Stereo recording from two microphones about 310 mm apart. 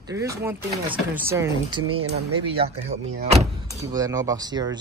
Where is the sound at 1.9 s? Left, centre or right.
Right.